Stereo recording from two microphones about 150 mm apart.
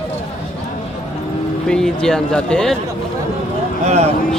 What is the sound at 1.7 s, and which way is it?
Speech, 5° left (ahead or behind).